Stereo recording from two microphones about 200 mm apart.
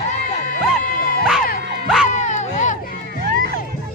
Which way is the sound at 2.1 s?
35° left (ahead or behind).